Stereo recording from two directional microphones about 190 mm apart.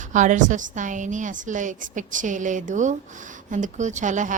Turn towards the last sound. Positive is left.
turn(degrees=-40)  # may be behind; listen again after turning